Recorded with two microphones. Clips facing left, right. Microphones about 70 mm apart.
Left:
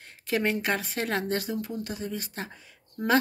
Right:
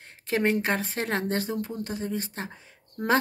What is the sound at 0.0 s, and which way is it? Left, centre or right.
Speech, right.